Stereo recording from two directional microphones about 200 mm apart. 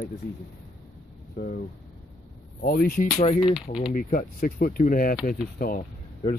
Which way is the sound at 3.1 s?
35° left (ahead or behind).